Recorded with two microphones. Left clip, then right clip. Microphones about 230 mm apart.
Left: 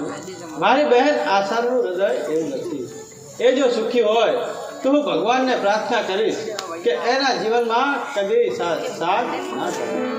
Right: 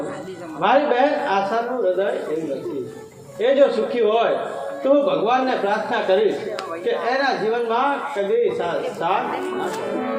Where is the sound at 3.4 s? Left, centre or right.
Left.